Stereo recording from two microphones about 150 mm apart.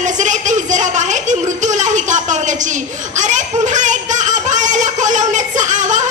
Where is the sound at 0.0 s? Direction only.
55° right (ahead or behind).